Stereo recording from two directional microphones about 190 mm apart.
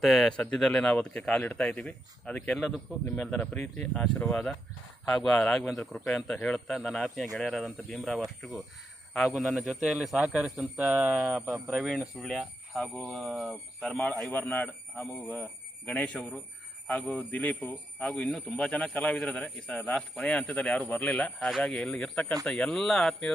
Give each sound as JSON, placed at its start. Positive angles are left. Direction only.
{"t": 0.0, "sound": "a man's voice", "side_deg": 0}